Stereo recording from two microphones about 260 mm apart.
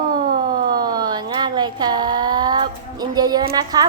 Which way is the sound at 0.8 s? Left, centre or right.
Centre.